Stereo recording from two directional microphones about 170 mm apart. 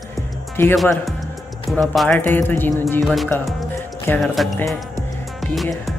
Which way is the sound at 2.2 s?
10° left (ahead or behind).